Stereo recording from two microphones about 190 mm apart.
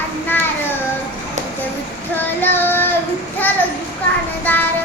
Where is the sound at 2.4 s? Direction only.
10° left (ahead or behind).